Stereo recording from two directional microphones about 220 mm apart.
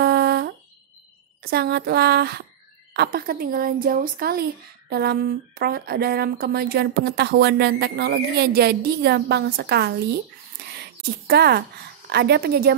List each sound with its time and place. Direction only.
0.0 s a sound: 45° right (ahead or behind)
1.4 s a woman's voice: 45° right (ahead or behind)
11.2 s a woman's voice: 45° right (ahead or behind)